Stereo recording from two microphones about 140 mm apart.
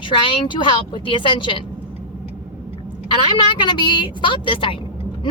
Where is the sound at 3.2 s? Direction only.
35° left (ahead or behind).